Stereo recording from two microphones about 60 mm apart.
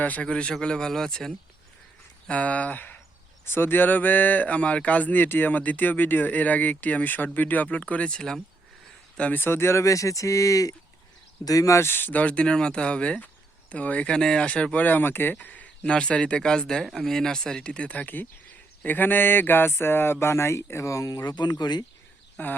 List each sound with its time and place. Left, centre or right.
0.0 s speech: left; by 1.4 s centre
2.3 s speech: left
3.4 s speech: left; by 8.4 s centre
9.3 s speech: left
11.8 s speech: left
18.9 s mantra: left
19.8 s speech: left
22.4 s speech: left